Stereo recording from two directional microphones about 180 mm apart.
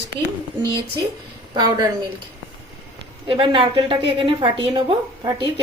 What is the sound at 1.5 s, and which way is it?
Speech, 25° right (ahead or behind).